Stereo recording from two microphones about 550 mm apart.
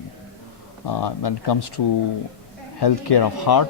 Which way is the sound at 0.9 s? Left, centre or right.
Left.